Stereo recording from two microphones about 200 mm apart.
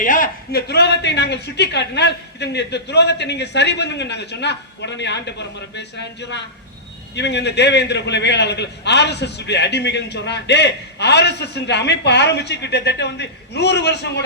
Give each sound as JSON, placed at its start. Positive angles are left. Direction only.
{"t": 0.0, "sound": "a man's voice", "side_deg": 40}